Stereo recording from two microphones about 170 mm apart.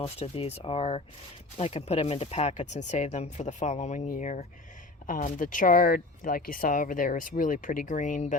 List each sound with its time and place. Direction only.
0.0 s speech: 35° left (ahead or behind)